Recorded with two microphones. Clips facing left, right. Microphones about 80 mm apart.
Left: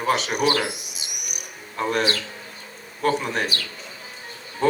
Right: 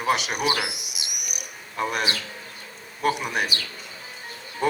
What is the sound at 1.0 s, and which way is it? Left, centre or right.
Cricket, left.